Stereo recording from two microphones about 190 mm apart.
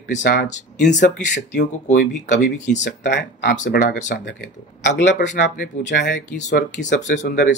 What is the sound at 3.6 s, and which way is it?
Speech, 50° left (ahead or behind).